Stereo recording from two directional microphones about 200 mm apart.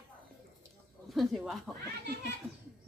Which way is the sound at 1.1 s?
Centre (ahead or behind).